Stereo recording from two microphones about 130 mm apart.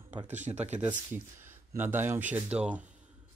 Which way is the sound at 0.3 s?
65° right (ahead or behind).